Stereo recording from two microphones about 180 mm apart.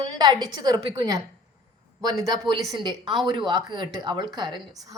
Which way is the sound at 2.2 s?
20° right (ahead or behind).